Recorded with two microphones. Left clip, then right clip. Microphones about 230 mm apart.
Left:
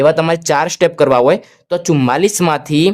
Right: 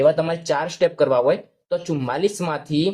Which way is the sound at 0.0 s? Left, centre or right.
Left.